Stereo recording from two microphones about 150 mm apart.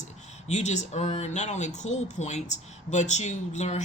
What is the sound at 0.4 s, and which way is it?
Speech, 50° left (ahead or behind).